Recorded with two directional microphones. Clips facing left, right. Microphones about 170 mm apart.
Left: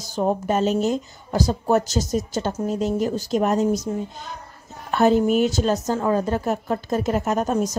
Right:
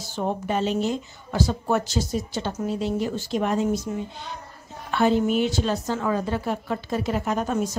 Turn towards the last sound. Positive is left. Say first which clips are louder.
# left 3 dB
turn(degrees=40)  # may be behind; listen again after turning